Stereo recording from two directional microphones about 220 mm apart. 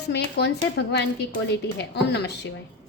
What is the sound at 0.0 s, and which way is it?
Speech, 50° left (ahead or behind).